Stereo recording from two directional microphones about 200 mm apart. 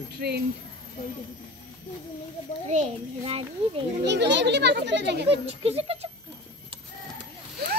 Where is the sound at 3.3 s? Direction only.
30° right (ahead or behind).